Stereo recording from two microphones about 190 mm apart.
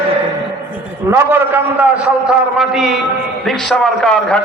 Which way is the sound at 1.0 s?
10° right (ahead or behind).